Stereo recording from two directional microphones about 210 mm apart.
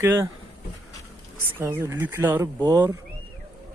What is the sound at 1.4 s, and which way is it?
Speech, 10° right (ahead or behind).